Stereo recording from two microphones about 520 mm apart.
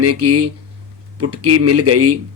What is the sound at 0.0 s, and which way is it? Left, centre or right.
Speech, right.